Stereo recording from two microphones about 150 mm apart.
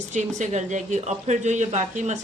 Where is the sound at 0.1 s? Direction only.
55° right (ahead or behind).